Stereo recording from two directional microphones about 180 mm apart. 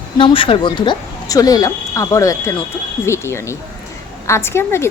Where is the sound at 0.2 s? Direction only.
30° left (ahead or behind).